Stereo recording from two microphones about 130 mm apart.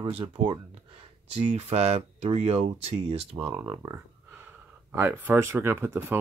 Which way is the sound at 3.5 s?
25° right (ahead or behind).